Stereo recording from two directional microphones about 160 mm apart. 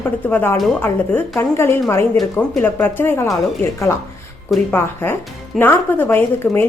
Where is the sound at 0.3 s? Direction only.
10° left (ahead or behind).